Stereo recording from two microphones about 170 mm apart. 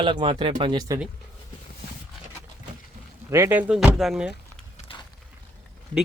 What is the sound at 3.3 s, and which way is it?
Speech, 15° right (ahead or behind).